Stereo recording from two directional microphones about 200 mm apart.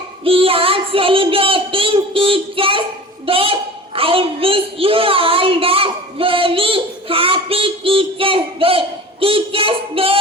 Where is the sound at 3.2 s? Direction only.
25° right (ahead or behind).